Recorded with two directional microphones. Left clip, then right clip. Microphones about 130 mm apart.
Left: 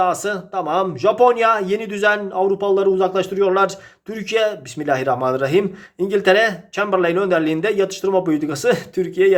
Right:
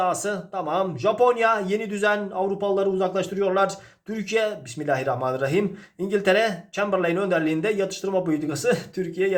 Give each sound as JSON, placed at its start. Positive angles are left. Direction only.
{"t": 0.0, "sound": "a man's voice", "side_deg": 40}